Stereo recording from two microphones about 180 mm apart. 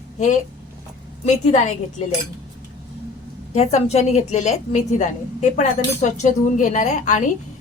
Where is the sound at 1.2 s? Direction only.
40° left (ahead or behind).